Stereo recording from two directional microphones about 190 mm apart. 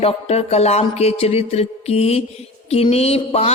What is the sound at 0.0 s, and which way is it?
Speech, 35° left (ahead or behind).